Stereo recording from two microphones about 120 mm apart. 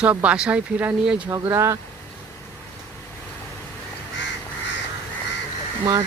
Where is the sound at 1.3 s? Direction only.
25° right (ahead or behind).